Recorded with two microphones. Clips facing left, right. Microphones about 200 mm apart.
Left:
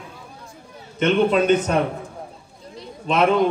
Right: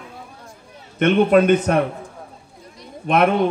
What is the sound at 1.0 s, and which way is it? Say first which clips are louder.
Speech: right 3 dB; 60° right (ahead or behind).